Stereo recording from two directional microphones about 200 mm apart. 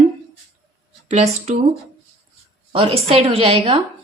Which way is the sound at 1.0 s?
35° right (ahead or behind).